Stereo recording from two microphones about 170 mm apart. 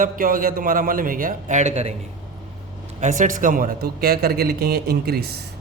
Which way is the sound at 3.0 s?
50° right (ahead or behind).